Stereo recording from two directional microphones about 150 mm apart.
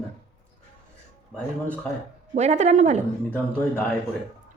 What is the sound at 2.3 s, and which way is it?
Speech, 50° right (ahead or behind).